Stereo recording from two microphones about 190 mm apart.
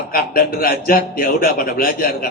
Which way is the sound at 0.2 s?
50° left (ahead or behind).